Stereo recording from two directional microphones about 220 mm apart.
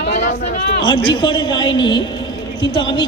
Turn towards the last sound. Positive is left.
turn(degrees=20)  # may be behind; listen again after turning